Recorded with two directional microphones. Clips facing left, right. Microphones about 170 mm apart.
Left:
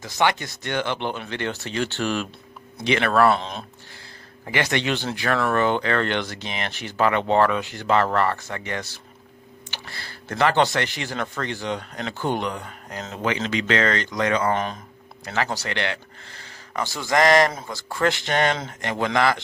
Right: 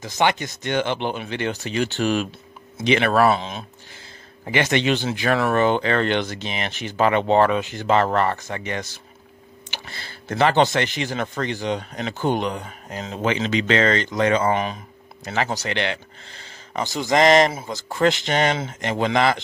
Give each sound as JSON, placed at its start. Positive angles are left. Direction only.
{"t": 0.0, "sound": "speech", "side_deg": -20}
{"t": 3.3, "sound": "speech", "side_deg": -5}
{"t": 4.5, "sound": "speech", "side_deg": -20}
{"t": 14.5, "sound": "speech", "side_deg": -10}
{"t": 15.2, "sound": "speech", "side_deg": -20}